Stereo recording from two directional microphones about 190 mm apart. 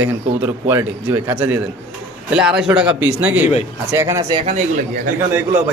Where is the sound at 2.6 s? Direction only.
5° right (ahead or behind).